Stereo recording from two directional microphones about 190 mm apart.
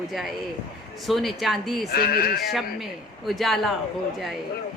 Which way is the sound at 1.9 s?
50° left (ahead or behind).